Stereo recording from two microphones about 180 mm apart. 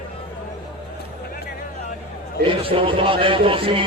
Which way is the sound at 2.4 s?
30° right (ahead or behind).